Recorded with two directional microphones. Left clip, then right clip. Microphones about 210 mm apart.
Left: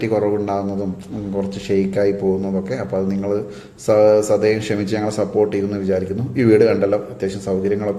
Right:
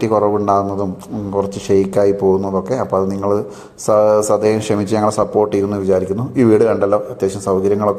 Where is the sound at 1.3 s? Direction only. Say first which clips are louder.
Right 5 dB; 15° right (ahead or behind).